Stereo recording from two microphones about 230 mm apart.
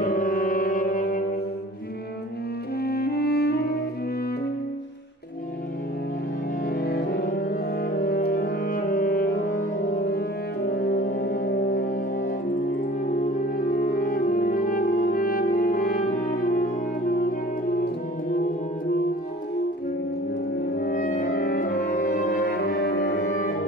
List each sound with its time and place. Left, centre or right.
0.0 s music: left
2.8 s music: left
6.8 s music: left
20.7 s music: left